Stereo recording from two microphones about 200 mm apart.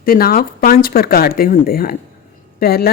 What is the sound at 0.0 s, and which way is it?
A woman's voice, 50° left (ahead or behind).